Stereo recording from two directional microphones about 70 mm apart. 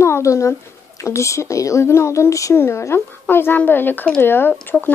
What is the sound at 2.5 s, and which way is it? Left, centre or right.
A woman's voice, left.